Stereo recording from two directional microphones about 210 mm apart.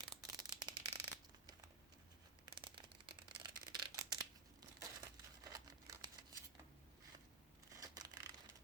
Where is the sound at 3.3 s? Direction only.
20° right (ahead or behind).